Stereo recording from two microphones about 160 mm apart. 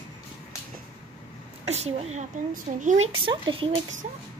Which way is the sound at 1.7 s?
40° right (ahead or behind).